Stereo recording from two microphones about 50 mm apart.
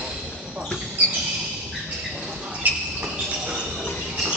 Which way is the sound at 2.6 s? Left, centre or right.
Right.